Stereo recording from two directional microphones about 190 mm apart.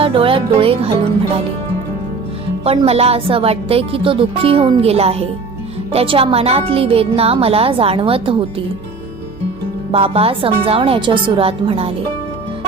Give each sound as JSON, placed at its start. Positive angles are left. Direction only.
{"t": 0.0, "sound": "speech", "side_deg": -30}
{"t": 2.6, "sound": "speech", "side_deg": -30}
{"t": 9.9, "sound": "speech", "side_deg": -30}